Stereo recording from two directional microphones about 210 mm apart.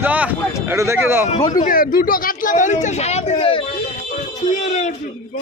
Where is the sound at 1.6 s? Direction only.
45° left (ahead or behind).